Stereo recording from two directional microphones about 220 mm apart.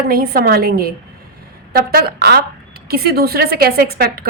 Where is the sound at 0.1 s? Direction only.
45° right (ahead or behind).